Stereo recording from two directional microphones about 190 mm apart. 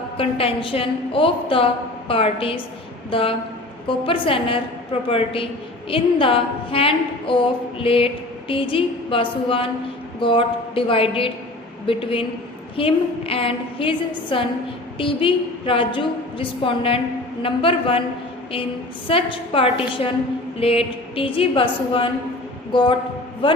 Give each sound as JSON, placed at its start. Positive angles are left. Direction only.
{"t": 0.2, "sound": "a woman's voice", "side_deg": 30}
{"t": 19.0, "sound": "a woman's voice", "side_deg": 30}